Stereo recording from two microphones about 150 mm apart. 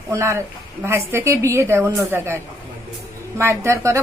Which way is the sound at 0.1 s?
20° right (ahead or behind).